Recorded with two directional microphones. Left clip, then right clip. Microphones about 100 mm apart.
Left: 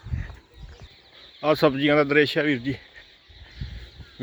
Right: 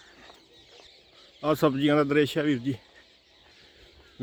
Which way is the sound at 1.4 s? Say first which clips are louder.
Left 4 dB; 10° right (ahead or behind).